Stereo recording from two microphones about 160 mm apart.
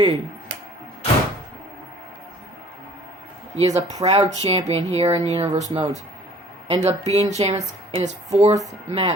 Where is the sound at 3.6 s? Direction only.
40° right (ahead or behind).